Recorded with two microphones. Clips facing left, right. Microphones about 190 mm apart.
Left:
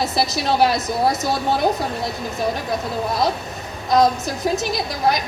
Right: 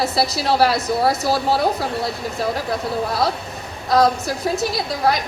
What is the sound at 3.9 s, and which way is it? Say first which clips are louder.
Speech: even; 20° left (ahead or behind).